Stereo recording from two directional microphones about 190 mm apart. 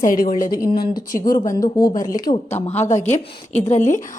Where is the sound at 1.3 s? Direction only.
15° left (ahead or behind).